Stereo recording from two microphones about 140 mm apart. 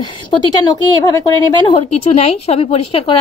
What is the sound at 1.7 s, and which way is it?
A woman's voice, 45° left (ahead or behind).